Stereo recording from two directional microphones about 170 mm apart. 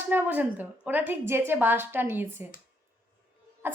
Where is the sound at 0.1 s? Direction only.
10° right (ahead or behind).